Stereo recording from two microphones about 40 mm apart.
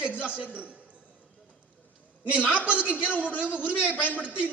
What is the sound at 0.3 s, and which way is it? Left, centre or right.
Speech, right.